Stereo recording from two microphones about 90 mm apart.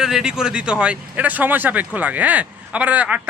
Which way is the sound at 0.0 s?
5° right (ahead or behind).